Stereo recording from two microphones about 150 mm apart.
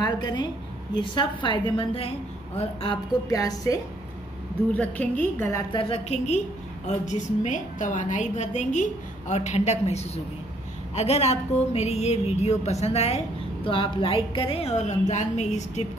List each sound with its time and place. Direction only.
0.0 s a woman's voice: 30° left (ahead or behind)
3.3 s a woman's voice: 25° left (ahead or behind)
4.7 s a woman's voice: 10° left (ahead or behind)
5.7 s a woman's voice: 35° left (ahead or behind)